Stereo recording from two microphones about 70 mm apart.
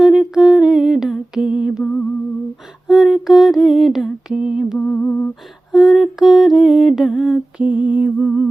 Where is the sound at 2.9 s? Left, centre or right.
Centre.